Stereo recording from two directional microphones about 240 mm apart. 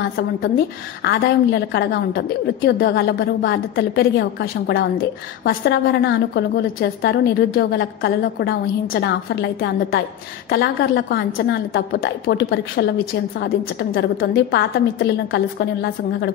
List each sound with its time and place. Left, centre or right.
1.0 s a woman's voice: left